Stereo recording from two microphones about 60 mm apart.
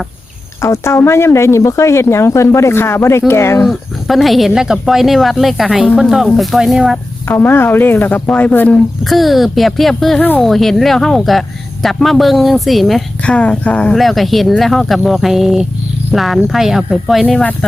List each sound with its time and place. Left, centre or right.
0.6 s speech: left
3.6 s speech: centre
7.3 s speech: left
9.0 s speech: centre
13.2 s speech: centre
13.9 s speech: centre
17.6 s speech: centre